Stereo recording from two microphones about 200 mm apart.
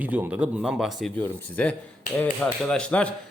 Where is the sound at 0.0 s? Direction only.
10° right (ahead or behind).